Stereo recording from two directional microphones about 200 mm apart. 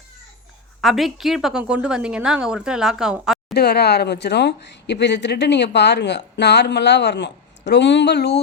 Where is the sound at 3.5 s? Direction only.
55° left (ahead or behind).